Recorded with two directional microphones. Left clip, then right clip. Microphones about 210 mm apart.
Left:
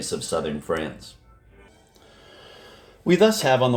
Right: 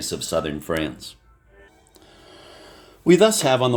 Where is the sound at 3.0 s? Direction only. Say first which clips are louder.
Right 2 dB; 30° right (ahead or behind).